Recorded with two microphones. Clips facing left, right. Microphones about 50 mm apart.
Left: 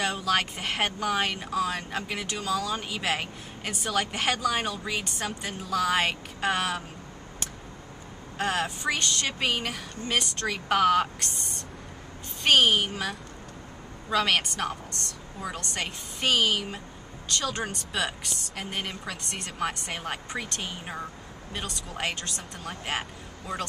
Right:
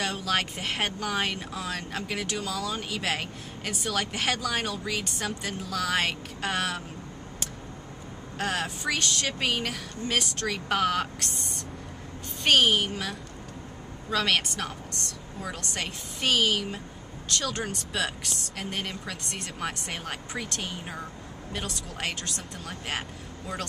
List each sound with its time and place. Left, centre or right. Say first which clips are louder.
0.0 s speech: left 2 dB; centre
8.4 s a woman's voice: left 2 dB; centre